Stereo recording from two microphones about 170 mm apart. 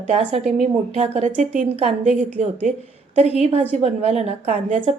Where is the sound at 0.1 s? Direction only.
40° right (ahead or behind).